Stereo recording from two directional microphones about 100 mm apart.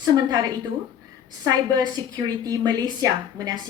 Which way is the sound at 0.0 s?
40° right (ahead or behind).